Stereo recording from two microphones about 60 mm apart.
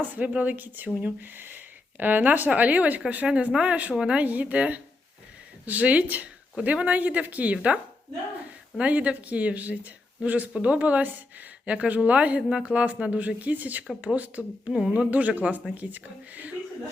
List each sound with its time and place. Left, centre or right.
0.0 s speech: right
8.8 s speech: right
14.7 s speech: centre
15.1 s speech: right